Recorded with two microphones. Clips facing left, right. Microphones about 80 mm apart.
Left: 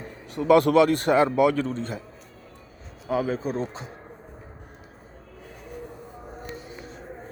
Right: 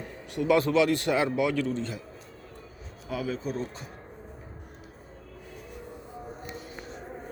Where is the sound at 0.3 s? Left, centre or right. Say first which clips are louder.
Left 5 dB; left.